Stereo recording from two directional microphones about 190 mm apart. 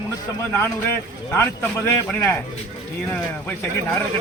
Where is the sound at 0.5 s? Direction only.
10° left (ahead or behind).